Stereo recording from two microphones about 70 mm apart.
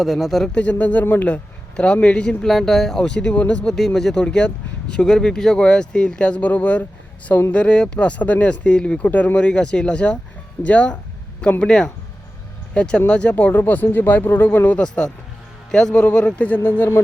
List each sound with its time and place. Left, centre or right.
0.0 s speech: centre
0.5 s speech: centre
1.7 s speech: centre
3.7 s speech: centre; by 14.8 s left
14.8 s speech: centre